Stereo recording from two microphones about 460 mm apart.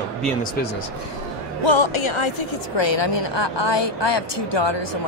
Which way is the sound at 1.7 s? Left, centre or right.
Left.